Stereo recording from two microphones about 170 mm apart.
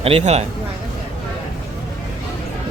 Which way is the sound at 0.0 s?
35° right (ahead or behind).